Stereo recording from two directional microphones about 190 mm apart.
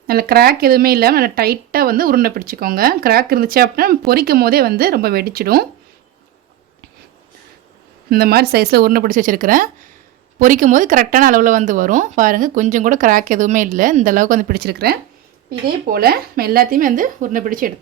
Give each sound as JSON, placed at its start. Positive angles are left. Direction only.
{"t": 0.1, "sound": "speech", "side_deg": -55}
{"t": 8.1, "sound": "speech", "side_deg": -55}